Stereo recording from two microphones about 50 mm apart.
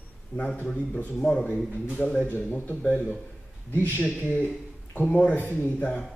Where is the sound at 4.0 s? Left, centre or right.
Left.